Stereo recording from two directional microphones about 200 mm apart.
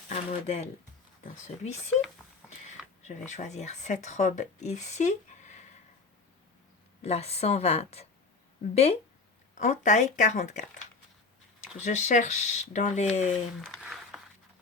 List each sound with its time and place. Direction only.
0.1 s speech: 30° left (ahead or behind)
3.0 s speech: 35° left (ahead or behind)
7.0 s speech: 30° left (ahead or behind)
11.8 s speech: 35° left (ahead or behind)
13.3 s a sound: centre (ahead or behind)